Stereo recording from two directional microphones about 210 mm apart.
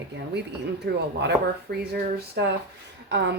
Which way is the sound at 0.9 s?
50° right (ahead or behind).